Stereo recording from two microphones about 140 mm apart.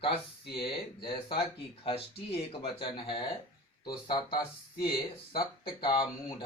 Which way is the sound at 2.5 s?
40° left (ahead or behind).